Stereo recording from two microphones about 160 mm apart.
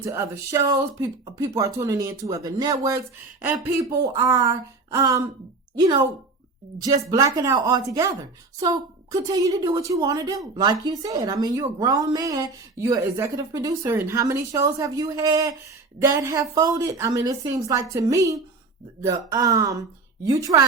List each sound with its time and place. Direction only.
0.0 s a woman's voice: 20° right (ahead or behind)
3.8 s a woman's voice: 20° right (ahead or behind)
7.1 s a woman's voice: 20° right (ahead or behind)